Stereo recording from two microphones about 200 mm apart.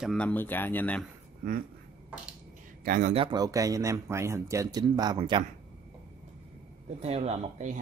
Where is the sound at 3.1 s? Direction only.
20° right (ahead or behind).